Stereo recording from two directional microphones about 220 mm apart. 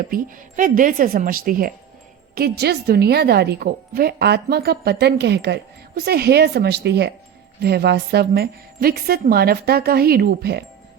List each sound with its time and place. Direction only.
0.0 s a woman's voice: 40° right (ahead or behind)